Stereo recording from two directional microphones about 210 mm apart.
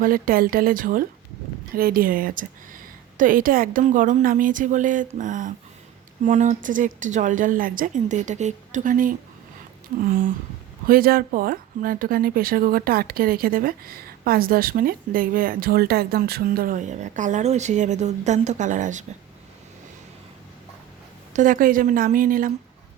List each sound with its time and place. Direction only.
0.0 s a woman's voice: 45° right (ahead or behind)
10.8 s speech: 45° right (ahead or behind)
21.3 s a woman's voice: 40° right (ahead or behind)